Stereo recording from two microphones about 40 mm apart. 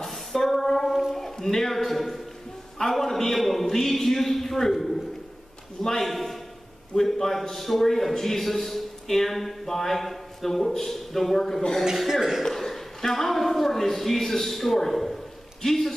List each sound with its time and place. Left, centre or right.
0.0 s a sound: centre
2.8 s a man's voice: centre
12.1 s speech: centre
12.4 s speech: centre